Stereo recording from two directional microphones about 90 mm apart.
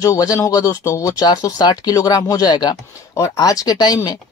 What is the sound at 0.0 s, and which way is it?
Speech, 40° left (ahead or behind).